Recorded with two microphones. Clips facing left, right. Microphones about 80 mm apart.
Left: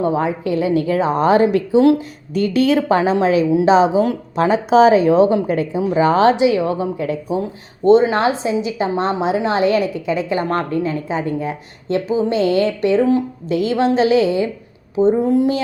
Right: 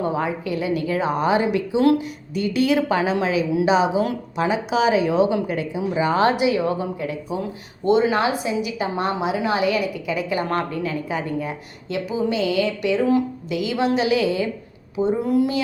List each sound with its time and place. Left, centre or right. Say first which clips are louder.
0.0 s a woman's voice: left 5 dB; left
1.8 s a woman's voice: left 3 dB; left
2.3 s a woman's voice: left 4 dB; left
11.9 s a woman's voice: left 5 dB; left